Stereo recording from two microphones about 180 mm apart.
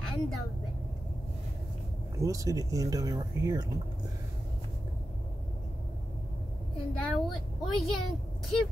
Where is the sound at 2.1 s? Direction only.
20° right (ahead or behind).